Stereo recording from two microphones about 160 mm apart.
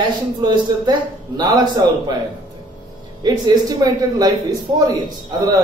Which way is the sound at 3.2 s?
25° right (ahead or behind).